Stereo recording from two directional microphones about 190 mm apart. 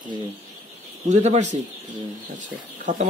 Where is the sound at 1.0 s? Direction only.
35° right (ahead or behind).